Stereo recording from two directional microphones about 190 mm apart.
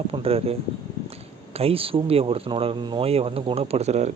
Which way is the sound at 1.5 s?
30° right (ahead or behind).